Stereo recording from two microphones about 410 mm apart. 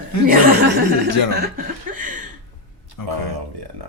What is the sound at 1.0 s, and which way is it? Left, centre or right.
Speech, right.